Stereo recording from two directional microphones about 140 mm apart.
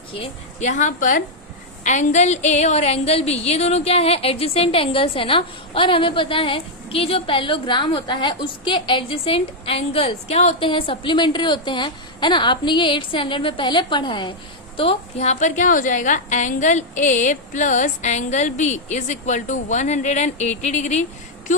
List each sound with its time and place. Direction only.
0.6 s a woman's voice: 60° left (ahead or behind); by 14.3 s 35° left (ahead or behind)
14.8 s a woman's voice: 45° left (ahead or behind)